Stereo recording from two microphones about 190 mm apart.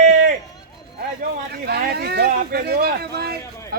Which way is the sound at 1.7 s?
55° right (ahead or behind).